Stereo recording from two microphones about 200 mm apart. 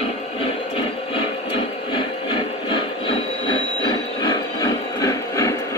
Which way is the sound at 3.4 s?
20° left (ahead or behind).